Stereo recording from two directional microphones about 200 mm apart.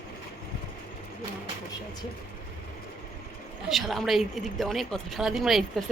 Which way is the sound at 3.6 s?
Centre (ahead or behind).